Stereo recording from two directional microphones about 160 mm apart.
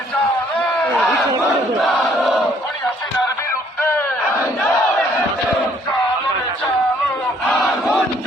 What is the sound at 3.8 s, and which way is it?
Crowd, 15° left (ahead or behind).